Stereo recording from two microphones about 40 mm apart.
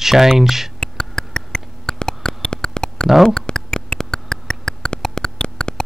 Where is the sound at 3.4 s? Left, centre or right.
Centre.